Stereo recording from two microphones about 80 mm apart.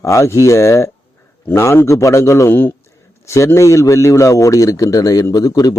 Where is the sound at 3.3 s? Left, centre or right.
Left.